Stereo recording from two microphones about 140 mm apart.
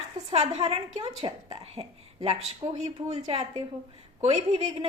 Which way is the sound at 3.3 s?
50° right (ahead or behind).